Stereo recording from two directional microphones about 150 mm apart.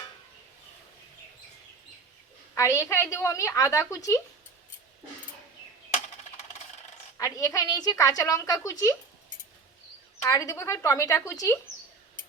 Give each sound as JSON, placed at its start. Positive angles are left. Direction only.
{"t": 2.6, "sound": "a woman's voice", "side_deg": 20}
{"t": 7.2, "sound": "a woman's voice", "side_deg": 20}
{"t": 10.2, "sound": "a woman's voice", "side_deg": 20}